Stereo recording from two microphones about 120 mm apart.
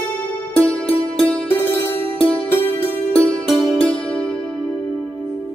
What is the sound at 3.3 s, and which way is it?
Music, 10° left (ahead or behind).